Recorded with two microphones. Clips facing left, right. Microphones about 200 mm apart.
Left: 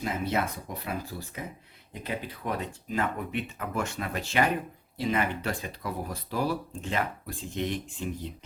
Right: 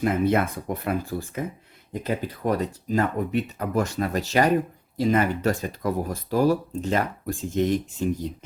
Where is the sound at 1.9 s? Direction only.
45° right (ahead or behind).